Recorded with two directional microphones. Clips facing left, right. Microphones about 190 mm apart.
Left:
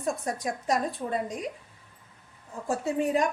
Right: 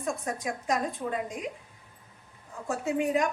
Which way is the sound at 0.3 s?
35° left (ahead or behind).